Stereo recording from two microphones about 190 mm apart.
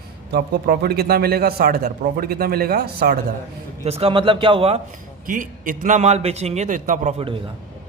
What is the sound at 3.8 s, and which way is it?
A man's voice, 30° right (ahead or behind).